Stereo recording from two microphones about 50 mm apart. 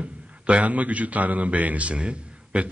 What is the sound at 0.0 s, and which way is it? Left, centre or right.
A man's voice, right.